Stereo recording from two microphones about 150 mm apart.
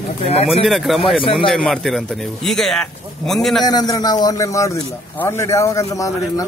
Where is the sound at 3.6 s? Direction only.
25° left (ahead or behind).